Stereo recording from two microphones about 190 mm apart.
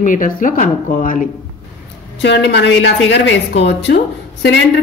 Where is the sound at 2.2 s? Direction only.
65° left (ahead or behind).